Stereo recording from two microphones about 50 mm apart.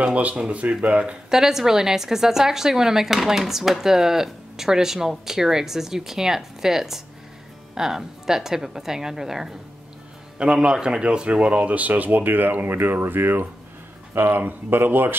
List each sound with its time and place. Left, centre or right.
0.0 s speech: right
1.3 s speech: centre; by 15.1 s right